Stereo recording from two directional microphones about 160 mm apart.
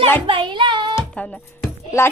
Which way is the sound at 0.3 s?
30° right (ahead or behind).